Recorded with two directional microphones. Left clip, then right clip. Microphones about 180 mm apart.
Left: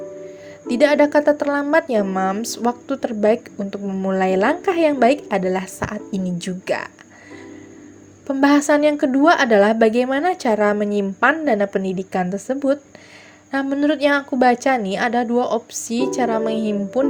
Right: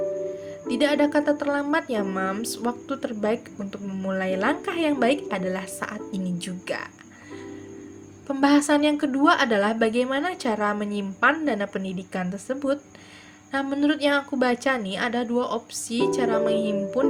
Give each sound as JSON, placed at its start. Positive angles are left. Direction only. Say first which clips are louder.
{"t": 0.7, "sound": "a woman's voice", "louder": "left 7 dB", "side_deg": 35}
{"t": 8.3, "sound": "a woman's voice", "louder": "left 5 dB", "side_deg": 30}